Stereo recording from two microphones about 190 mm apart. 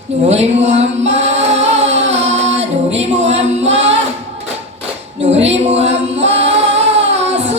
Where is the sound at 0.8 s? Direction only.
35° right (ahead or behind).